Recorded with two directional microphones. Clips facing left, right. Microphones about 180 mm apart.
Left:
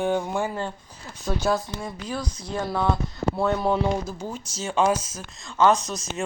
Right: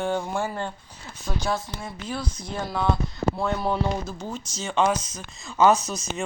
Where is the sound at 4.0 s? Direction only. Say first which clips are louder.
Left 1 dB; 10° left (ahead or behind).